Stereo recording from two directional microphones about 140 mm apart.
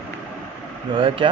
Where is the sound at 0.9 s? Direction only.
35° right (ahead or behind).